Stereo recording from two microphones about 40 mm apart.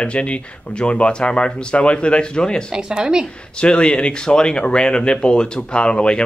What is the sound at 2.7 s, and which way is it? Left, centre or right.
Speech, right.